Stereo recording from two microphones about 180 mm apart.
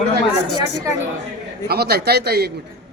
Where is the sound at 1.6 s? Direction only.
60° right (ahead or behind).